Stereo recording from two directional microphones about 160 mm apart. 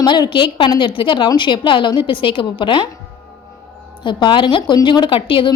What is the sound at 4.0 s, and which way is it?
Speech, 30° left (ahead or behind).